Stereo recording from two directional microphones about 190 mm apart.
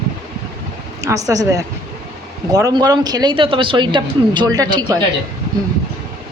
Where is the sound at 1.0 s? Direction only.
15° right (ahead or behind).